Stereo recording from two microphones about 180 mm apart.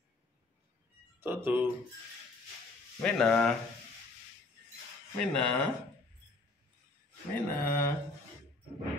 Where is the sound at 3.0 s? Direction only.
5° left (ahead or behind).